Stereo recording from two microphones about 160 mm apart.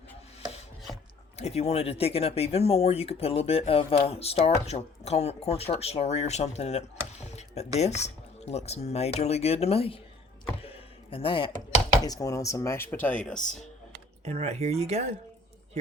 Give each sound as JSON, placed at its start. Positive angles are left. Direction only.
{"t": 1.4, "sound": "speech", "side_deg": 40}
{"t": 7.3, "sound": "a sound", "side_deg": 45}
{"t": 7.8, "sound": "speech", "side_deg": 45}
{"t": 10.6, "sound": "a sound", "side_deg": 35}
{"t": 12.0, "sound": "speech", "side_deg": 20}
{"t": 13.3, "sound": "speech", "side_deg": 50}
{"t": 14.3, "sound": "speech", "side_deg": -45}